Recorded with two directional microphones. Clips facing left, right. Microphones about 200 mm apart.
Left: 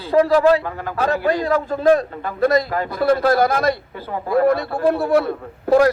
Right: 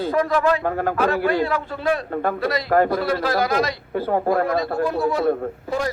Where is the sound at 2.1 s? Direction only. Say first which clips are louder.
Right 6 dB; 55° right (ahead or behind).